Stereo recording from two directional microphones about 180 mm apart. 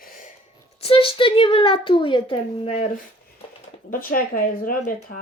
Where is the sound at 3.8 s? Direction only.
50° left (ahead or behind).